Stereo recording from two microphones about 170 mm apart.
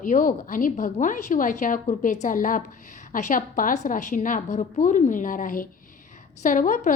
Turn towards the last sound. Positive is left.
turn(degrees=50)  # may be behind; listen again after turning